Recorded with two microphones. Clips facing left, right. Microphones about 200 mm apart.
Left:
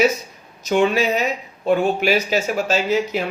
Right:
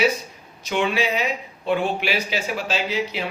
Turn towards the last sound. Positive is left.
turn(degrees=45)  # may be behind; listen again after turning